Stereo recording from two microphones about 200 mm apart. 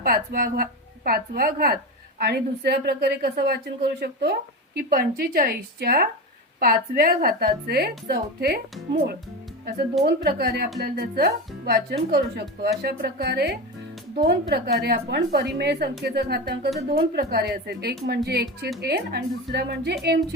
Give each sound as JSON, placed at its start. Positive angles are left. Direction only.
{"t": 0.0, "sound": "a woman's voice", "side_deg": -45}
{"t": 10.2, "sound": "a woman's voice", "side_deg": -55}